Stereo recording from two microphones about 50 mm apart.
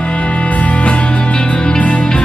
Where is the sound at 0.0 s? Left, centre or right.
Left.